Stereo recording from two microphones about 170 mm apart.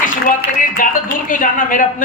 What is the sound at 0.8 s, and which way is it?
A man's voice, 50° left (ahead or behind).